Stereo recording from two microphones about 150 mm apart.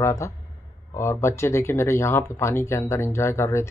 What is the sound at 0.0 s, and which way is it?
A man's voice, 20° left (ahead or behind).